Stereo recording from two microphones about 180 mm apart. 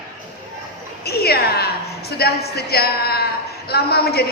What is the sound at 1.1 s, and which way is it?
A woman's voice, 60° left (ahead or behind).